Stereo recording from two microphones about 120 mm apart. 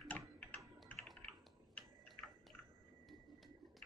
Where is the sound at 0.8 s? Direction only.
10° left (ahead or behind).